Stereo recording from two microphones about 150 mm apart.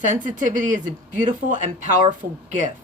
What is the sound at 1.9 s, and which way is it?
Speech, 55° right (ahead or behind).